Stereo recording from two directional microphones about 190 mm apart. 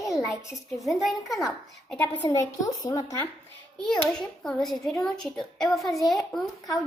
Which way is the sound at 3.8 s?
5° left (ahead or behind).